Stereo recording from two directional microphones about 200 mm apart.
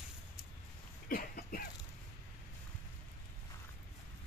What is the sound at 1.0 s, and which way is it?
Cough, 45° left (ahead or behind).